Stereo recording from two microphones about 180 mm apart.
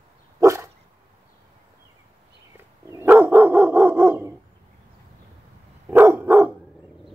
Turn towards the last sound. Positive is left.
turn(degrees=-15)  # may be behind; listen again after turning